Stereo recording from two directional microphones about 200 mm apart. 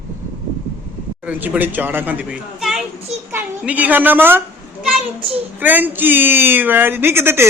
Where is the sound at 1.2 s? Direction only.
10° right (ahead or behind).